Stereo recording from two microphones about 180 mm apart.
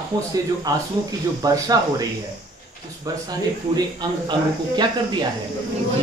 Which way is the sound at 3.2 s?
25° right (ahead or behind).